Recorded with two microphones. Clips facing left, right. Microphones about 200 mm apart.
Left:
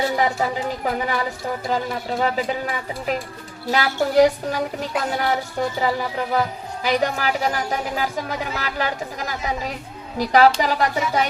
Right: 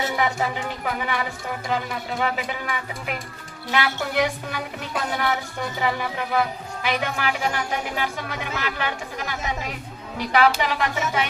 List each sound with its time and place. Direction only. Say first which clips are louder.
0.0 s speech: left 3 dB; 35° left (ahead or behind)